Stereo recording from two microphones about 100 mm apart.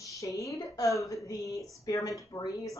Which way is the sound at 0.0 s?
35° left (ahead or behind).